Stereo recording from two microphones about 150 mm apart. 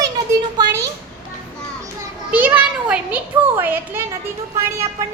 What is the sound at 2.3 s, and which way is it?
Speech, 10° right (ahead or behind).